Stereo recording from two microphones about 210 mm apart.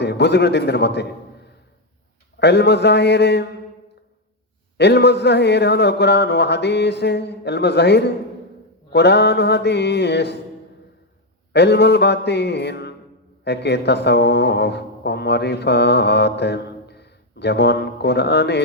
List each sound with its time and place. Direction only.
0.0 s speech: 55° left (ahead or behind)
2.4 s speech: 55° left (ahead or behind)
4.8 s speech: 50° left (ahead or behind)
11.5 s speech: 55° left (ahead or behind)